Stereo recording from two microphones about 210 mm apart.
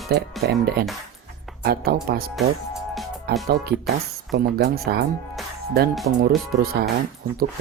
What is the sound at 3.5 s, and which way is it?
Speech, 50° right (ahead or behind).